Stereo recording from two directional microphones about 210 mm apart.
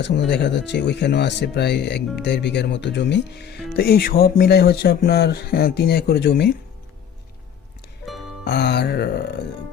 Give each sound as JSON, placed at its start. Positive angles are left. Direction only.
{"t": 0.3, "sound": "speech", "side_deg": 55}
{"t": 8.4, "sound": "speech", "side_deg": 50}